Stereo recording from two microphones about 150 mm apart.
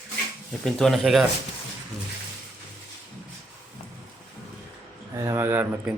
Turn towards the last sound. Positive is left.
turn(degrees=-15)  # may be behind; listen again after turning